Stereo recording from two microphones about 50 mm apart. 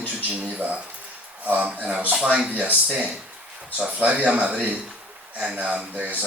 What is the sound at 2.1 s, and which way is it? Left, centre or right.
Speech, centre.